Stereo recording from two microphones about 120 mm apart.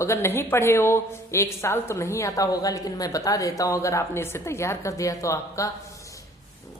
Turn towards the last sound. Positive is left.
turn(degrees=25)  # may be behind; listen again after turning